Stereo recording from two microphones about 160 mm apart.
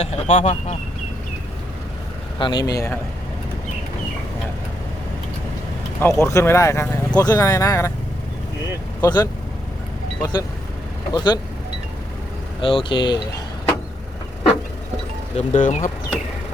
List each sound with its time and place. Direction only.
0.0 s speech: 45° left (ahead or behind)
2.4 s speech: 30° left (ahead or behind)
6.0 s speech: 20° left (ahead or behind)
9.0 s speech: 25° left (ahead or behind)
12.6 s speech: 30° left (ahead or behind)
15.4 s speech: 50° left (ahead or behind)